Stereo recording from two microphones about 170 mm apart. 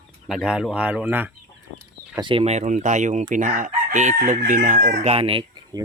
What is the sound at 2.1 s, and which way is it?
Chicken, 30° right (ahead or behind).